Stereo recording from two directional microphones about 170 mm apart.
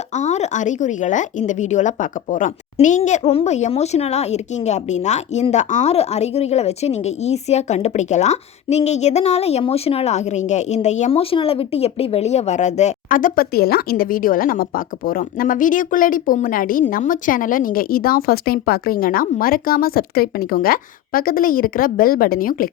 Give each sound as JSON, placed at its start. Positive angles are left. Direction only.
{"t": 0.2, "sound": "a woman's voice", "side_deg": 40}